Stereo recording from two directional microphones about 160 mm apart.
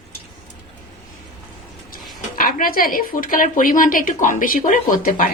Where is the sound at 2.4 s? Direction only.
60° left (ahead or behind).